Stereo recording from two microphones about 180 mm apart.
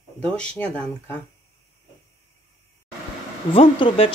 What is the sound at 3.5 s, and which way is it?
Speech, 30° left (ahead or behind).